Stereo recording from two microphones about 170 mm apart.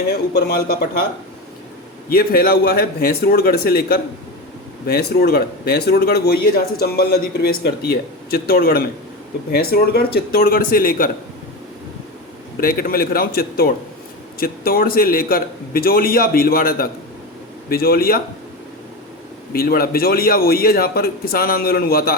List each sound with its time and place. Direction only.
0.3 s a man's voice: 65° left (ahead or behind)
2.0 s a man's voice: 60° left (ahead or behind)
12.5 s a man's voice: 60° left (ahead or behind)
19.5 s a man's voice: 60° left (ahead or behind)